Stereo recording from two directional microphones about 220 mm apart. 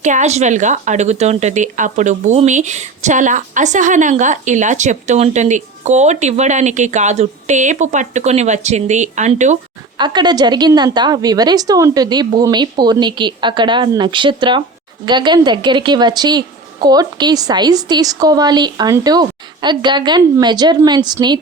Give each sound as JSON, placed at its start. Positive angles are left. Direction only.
{"t": 0.0, "sound": "speech", "side_deg": -35}
{"t": 10.0, "sound": "a woman's voice", "side_deg": -20}